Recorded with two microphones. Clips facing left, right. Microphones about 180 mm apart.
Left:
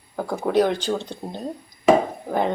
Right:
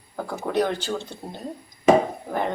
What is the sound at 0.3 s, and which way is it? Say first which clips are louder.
Speech: left 4 dB; 10° left (ahead or behind).